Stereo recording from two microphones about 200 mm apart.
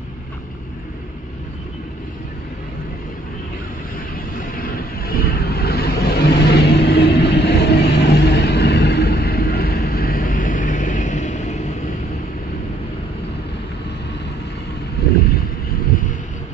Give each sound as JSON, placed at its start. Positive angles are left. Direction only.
{"t": 5.0, "sound": "vehicle", "side_deg": 50}